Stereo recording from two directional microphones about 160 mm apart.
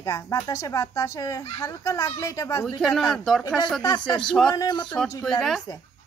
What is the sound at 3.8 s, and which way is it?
Speech, 30° left (ahead or behind).